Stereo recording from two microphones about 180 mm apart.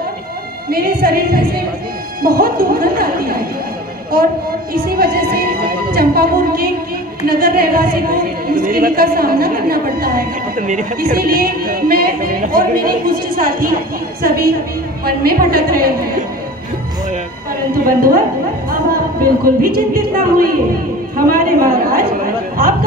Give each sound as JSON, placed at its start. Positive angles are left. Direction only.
{"t": 0.7, "sound": "a woman's voice", "side_deg": -55}
{"t": 4.8, "sound": "music", "side_deg": -55}
{"t": 7.2, "sound": "a woman's voice", "side_deg": -55}
{"t": 17.8, "sound": "speech", "side_deg": -50}
{"t": 19.2, "sound": "a woman's voice", "side_deg": -55}
{"t": 22.6, "sound": "a sound", "side_deg": -55}